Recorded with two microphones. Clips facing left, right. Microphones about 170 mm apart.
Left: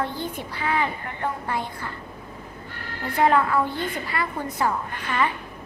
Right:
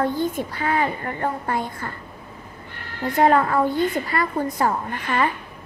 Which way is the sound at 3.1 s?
40° right (ahead or behind).